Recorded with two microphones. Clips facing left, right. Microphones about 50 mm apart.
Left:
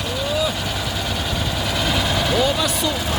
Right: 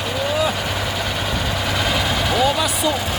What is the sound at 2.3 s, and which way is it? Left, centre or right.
Speech, centre.